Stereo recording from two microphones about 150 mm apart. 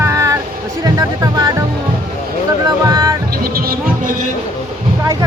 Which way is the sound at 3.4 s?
75° right (ahead or behind).